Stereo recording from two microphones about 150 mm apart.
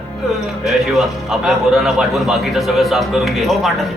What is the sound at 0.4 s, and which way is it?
A man's voice, 5° right (ahead or behind).